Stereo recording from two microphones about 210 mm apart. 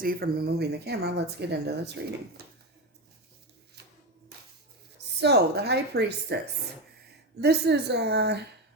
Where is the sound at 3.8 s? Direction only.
50° right (ahead or behind).